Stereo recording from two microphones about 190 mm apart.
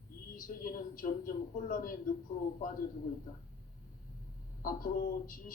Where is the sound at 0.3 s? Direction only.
45° left (ahead or behind).